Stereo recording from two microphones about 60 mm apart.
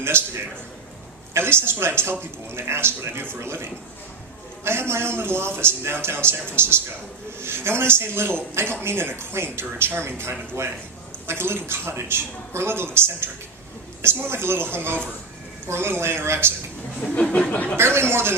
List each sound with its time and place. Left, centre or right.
1.3 s a man's voice: right
17.2 s a sound: centre
17.5 s speech: left
17.7 s a man's voice: right